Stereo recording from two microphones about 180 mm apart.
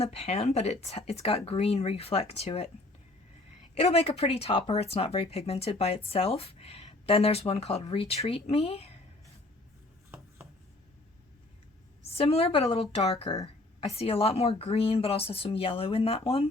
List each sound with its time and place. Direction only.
0.0 s speech: 35° left (ahead or behind)
3.8 s speech: 35° left (ahead or behind)
12.0 s a woman's voice: 35° left (ahead or behind)